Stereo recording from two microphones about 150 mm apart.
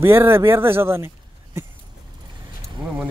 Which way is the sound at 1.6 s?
15° right (ahead or behind).